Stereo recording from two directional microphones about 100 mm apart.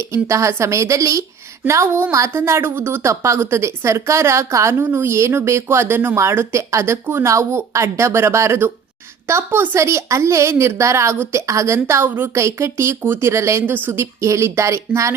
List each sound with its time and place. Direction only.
0.1 s a woman's voice: 30° right (ahead or behind)